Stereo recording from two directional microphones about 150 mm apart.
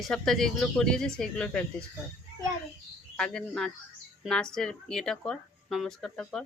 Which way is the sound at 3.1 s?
5° left (ahead or behind).